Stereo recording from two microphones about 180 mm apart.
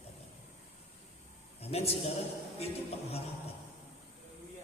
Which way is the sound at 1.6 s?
35° left (ahead or behind).